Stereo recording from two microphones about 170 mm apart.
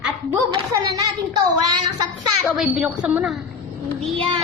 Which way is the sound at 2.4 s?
5° right (ahead or behind).